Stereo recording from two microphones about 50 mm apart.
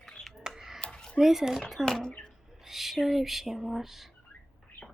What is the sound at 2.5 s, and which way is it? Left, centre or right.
Speech, centre.